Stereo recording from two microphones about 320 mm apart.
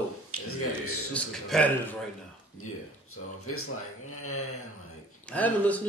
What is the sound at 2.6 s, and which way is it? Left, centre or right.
Speech, left.